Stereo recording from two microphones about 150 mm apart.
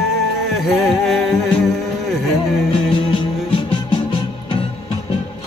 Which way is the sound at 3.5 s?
35° left (ahead or behind).